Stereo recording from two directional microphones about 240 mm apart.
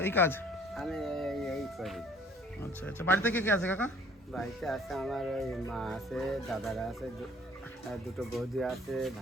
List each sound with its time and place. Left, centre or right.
0.0 s music: centre
2.8 s speech: centre